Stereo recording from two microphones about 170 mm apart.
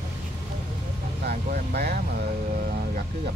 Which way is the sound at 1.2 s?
70° right (ahead or behind).